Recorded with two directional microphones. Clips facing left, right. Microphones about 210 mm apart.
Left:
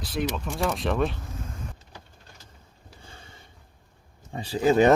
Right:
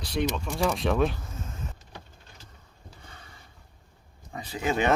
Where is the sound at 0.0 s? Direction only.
Centre (ahead or behind).